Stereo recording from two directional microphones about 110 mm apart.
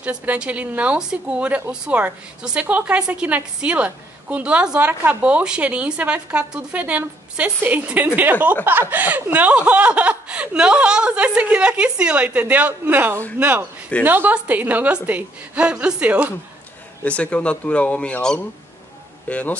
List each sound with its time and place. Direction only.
0.0 s a woman's voice: 15° right (ahead or behind)
17.0 s speech: 10° left (ahead or behind)